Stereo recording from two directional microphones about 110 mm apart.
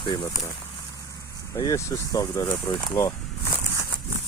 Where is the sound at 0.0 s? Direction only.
40° left (ahead or behind).